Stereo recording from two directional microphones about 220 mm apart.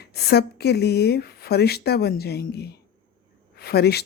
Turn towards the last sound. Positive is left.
turn(degrees=45)  # may be behind; listen again after turning